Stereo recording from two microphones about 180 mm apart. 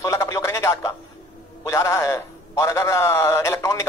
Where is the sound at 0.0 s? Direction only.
15° left (ahead or behind).